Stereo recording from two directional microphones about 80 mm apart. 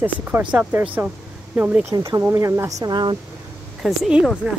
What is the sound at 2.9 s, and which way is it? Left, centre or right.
Speech, right.